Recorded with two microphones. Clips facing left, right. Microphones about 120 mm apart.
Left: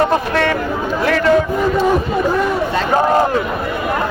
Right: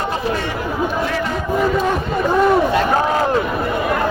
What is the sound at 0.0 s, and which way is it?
A man's voice, 70° left (ahead or behind).